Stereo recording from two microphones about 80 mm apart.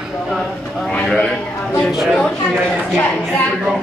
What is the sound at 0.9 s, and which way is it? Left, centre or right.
Speech, centre.